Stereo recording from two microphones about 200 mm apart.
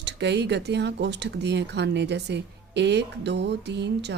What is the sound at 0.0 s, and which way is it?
Speech, 60° right (ahead or behind).